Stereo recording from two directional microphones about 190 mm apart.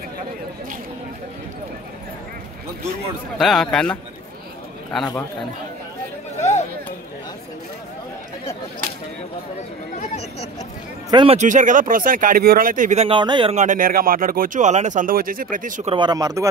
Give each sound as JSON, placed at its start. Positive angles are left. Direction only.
{"t": 3.3, "sound": "a man's voice", "side_deg": 0}
{"t": 6.3, "sound": "a sound", "side_deg": 35}
{"t": 9.9, "sound": "speech", "side_deg": 35}
{"t": 11.1, "sound": "speech", "side_deg": -25}
{"t": 11.3, "sound": "speech", "side_deg": -40}
{"t": 13.6, "sound": "speech", "side_deg": -45}
{"t": 15.9, "sound": "speech", "side_deg": -25}